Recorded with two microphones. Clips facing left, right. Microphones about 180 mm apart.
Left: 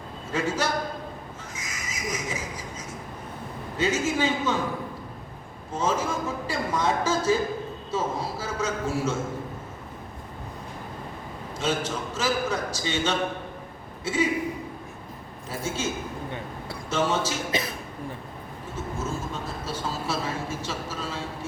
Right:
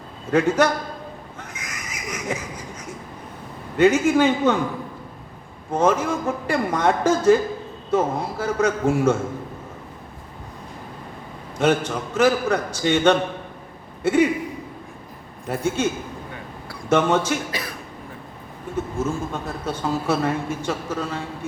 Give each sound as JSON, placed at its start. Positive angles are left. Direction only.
{"t": 0.3, "sound": "speech", "side_deg": -60}
{"t": 1.5, "sound": "a sound", "side_deg": -65}
{"t": 3.8, "sound": "speech", "side_deg": -60}
{"t": 5.7, "sound": "speech", "side_deg": -60}
{"t": 11.6, "sound": "a man's voice", "side_deg": -60}
{"t": 15.4, "sound": "speech", "side_deg": -60}
{"t": 16.9, "sound": "speech", "side_deg": -60}
{"t": 17.5, "sound": "speech", "side_deg": 20}
{"t": 19.3, "sound": "speech", "side_deg": -60}